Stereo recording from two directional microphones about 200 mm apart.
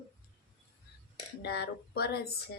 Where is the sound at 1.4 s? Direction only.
55° left (ahead or behind).